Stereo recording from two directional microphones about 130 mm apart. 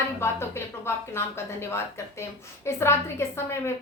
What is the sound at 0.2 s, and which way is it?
Speech, 20° left (ahead or behind).